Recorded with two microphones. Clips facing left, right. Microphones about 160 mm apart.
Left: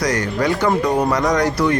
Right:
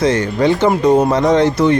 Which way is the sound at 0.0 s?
25° right (ahead or behind).